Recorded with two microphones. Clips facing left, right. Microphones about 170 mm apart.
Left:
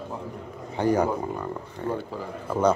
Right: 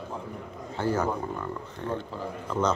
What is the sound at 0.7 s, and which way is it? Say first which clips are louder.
Speech: left 4 dB; 15° left (ahead or behind).